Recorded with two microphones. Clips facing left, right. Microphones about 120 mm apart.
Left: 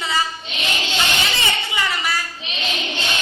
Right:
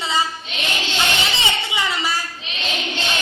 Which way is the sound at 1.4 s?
15° right (ahead or behind).